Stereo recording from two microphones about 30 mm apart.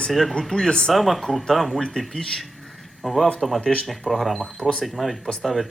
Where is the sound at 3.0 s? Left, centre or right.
Centre.